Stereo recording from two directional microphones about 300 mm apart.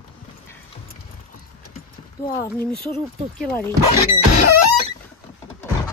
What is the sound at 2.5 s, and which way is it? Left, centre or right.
Speech, centre.